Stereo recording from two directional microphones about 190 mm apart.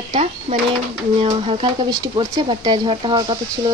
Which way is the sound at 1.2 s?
30° right (ahead or behind).